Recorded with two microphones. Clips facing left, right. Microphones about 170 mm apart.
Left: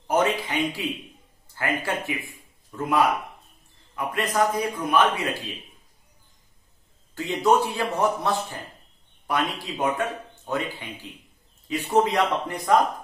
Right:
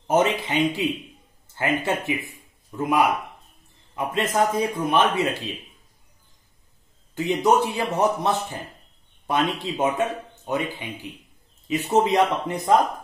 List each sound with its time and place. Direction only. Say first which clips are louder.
0.0 s a sound: right 2 dB; 20° right (ahead or behind)
1.5 s speech: right 3 dB; 20° right (ahead or behind)
7.2 s speech: right 1 dB; 20° right (ahead or behind)